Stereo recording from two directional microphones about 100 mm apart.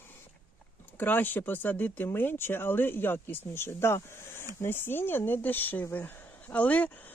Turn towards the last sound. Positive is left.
turn(degrees=15)  # may be behind; listen again after turning